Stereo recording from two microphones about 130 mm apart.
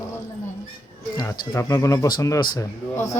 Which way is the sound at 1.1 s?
25° left (ahead or behind).